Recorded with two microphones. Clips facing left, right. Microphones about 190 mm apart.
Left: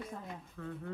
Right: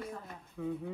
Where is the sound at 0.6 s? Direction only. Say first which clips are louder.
Right 8 dB; 10° right (ahead or behind).